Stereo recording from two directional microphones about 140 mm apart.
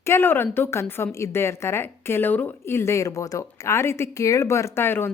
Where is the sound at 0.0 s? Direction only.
15° left (ahead or behind).